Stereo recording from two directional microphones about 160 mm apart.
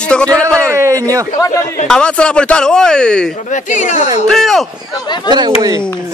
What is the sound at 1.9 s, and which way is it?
Speech, 5° left (ahead or behind).